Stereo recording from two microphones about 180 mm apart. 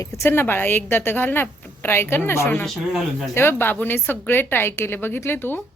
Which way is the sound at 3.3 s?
10° left (ahead or behind).